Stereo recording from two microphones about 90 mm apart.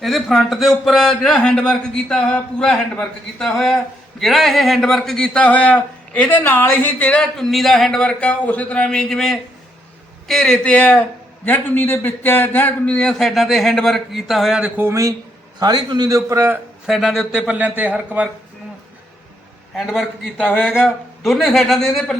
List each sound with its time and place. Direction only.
0.0 s a man's voice: centre (ahead or behind)
10.7 s a man's voice: 15° left (ahead or behind); by 14.7 s 5° right (ahead or behind)
14.8 s speech: 30° right (ahead or behind)
15.5 s a man's voice: 55° right (ahead or behind); by 16.5 s 35° right (ahead or behind)
16.8 s speech: 5° right (ahead or behind)
19.7 s a man's voice: 5° right (ahead or behind)